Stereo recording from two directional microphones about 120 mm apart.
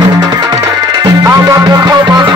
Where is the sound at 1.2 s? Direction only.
25° right (ahead or behind).